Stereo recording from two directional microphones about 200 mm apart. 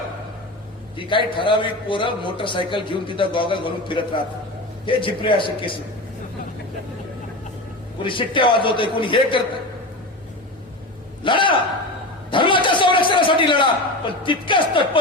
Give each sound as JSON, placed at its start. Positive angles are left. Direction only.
{"t": 0.9, "sound": "a man's voice", "side_deg": 25}
{"t": 8.0, "sound": "a man's voice", "side_deg": 25}
{"t": 11.2, "sound": "a man's voice", "side_deg": 25}
{"t": 12.3, "sound": "a sound", "side_deg": 25}